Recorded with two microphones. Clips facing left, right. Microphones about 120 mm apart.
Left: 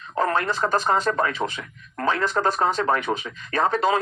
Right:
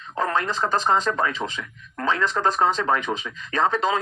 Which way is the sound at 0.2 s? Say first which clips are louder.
Left 1 dB; 45° left (ahead or behind).